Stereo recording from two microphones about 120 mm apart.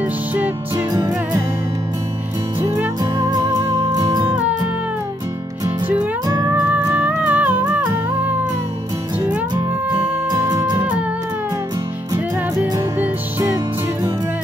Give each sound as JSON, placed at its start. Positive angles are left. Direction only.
{"t": 0.0, "sound": "music", "side_deg": -15}
{"t": 0.9, "sound": "music", "side_deg": -30}
{"t": 2.6, "sound": "music", "side_deg": -20}
{"t": 3.0, "sound": "music", "side_deg": -30}
{"t": 4.3, "sound": "music", "side_deg": -10}
{"t": 6.5, "sound": "music", "side_deg": -15}
{"t": 10.3, "sound": "music", "side_deg": -30}
{"t": 10.8, "sound": "music", "side_deg": -10}